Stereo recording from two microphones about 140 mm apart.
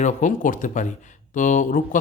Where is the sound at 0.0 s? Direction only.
65° left (ahead or behind).